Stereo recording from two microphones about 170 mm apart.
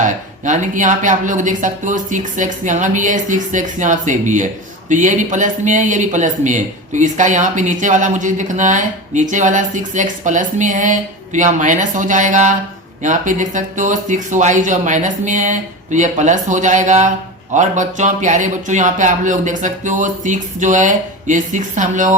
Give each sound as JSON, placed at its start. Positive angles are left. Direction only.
{"t": 0.0, "sound": "speech", "side_deg": -45}